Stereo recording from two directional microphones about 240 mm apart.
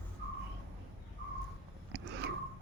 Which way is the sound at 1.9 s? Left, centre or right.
Right.